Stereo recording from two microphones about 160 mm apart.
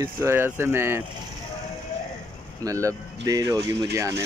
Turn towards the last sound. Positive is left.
turn(degrees=-20)  # may be behind; listen again after turning